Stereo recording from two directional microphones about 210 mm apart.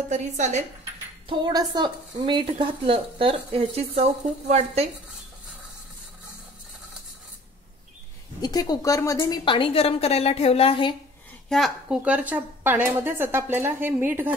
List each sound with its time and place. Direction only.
0.1 s a woman's voice: 35° right (ahead or behind)
1.4 s speech: 20° right (ahead or behind)
8.4 s a woman's voice: 20° left (ahead or behind)
11.4 s a woman's voice: centre (ahead or behind)